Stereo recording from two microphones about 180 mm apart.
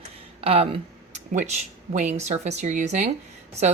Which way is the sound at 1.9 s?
40° right (ahead or behind).